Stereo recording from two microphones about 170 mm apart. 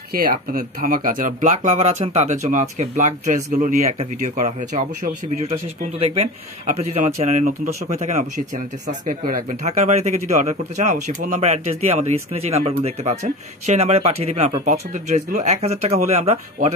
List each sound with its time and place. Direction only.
0.1 s speech: 60° right (ahead or behind); by 16.3 s 40° right (ahead or behind)